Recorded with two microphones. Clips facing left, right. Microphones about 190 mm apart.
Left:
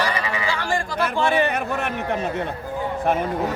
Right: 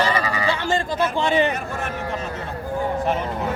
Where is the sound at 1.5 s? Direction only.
60° left (ahead or behind).